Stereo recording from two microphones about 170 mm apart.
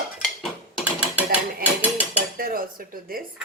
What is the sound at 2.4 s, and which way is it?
Speech, 60° right (ahead or behind).